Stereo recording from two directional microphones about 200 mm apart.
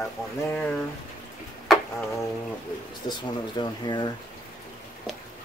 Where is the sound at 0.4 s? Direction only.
10° left (ahead or behind).